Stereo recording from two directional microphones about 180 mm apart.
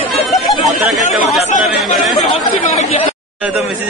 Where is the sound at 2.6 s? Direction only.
35° left (ahead or behind).